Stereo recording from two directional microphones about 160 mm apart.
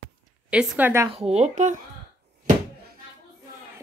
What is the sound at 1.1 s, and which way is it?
Speech, 40° right (ahead or behind).